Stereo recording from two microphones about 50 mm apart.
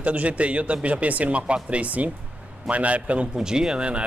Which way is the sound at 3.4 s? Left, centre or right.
Centre.